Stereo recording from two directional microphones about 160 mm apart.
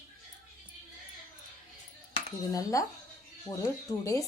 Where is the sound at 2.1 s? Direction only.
20° left (ahead or behind).